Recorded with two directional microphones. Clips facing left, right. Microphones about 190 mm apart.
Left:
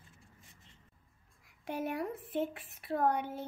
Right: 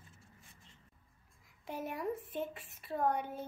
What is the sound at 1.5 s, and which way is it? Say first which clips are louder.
A woman's voice: left 5 dB; 70° left (ahead or behind).